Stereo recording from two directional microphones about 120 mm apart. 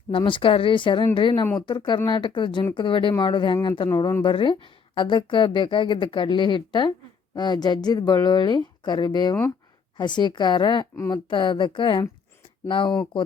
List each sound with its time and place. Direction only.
0.1 s speech: 45° left (ahead or behind)